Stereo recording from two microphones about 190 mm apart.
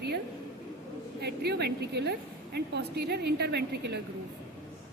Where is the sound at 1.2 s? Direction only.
60° right (ahead or behind).